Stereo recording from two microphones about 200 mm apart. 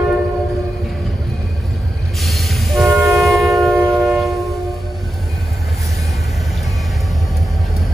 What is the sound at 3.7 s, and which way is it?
Train, 20° right (ahead or behind).